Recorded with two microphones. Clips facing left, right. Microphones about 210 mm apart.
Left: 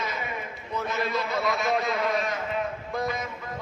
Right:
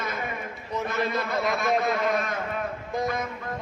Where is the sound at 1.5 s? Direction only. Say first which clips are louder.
Right 2 dB; 50° right (ahead or behind).